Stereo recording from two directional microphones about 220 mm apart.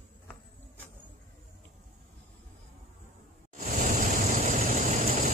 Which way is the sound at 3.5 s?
35° right (ahead or behind).